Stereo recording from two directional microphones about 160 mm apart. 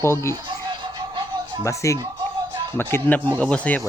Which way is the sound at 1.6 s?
20° left (ahead or behind).